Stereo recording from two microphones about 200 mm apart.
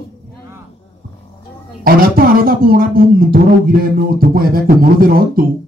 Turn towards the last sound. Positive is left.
turn(degrees=-45)  # may be behind; listen again after turning